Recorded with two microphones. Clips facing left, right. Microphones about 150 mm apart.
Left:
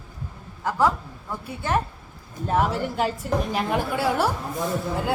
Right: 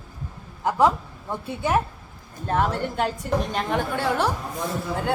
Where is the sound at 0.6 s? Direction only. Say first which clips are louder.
Right 2 dB; 20° right (ahead or behind).